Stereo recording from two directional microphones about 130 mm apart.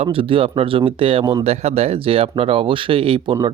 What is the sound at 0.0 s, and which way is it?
Speech, 45° right (ahead or behind).